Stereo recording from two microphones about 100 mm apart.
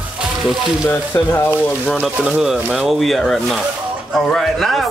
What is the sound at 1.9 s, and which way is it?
A man's voice, 10° right (ahead or behind).